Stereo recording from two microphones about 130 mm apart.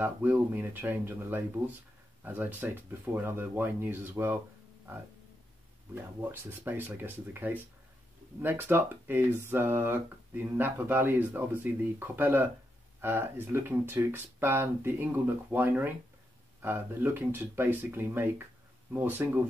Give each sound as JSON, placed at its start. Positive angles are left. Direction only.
{"t": 0.0, "sound": "speech", "side_deg": -15}
{"t": 6.2, "sound": "speech", "side_deg": -15}